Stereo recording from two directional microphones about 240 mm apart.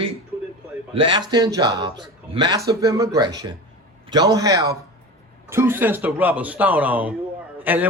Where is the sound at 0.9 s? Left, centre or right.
Centre.